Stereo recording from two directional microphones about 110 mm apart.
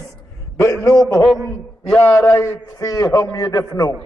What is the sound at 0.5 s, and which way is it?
Speech, 25° left (ahead or behind).